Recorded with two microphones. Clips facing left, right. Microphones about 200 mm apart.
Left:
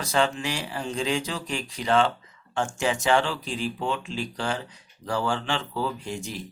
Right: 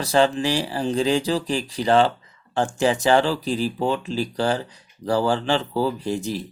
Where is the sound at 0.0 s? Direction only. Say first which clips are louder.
Right 6 dB; 35° right (ahead or behind).